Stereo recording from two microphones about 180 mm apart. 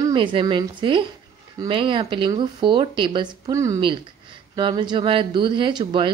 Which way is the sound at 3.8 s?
30° right (ahead or behind).